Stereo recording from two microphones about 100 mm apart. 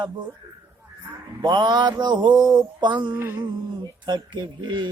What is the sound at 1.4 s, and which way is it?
Music, 45° right (ahead or behind).